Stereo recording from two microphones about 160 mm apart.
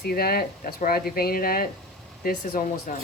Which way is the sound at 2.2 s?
60° left (ahead or behind).